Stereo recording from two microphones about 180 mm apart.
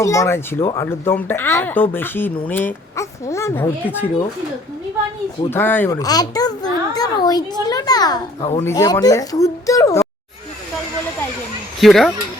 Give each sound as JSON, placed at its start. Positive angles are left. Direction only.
{"t": 0.0, "sound": "speech", "side_deg": 15}
{"t": 5.5, "sound": "a child's voice", "side_deg": 10}
{"t": 8.4, "sound": "speech", "side_deg": 35}
{"t": 8.6, "sound": "a child's voice", "side_deg": 20}
{"t": 11.8, "sound": "speech", "side_deg": 0}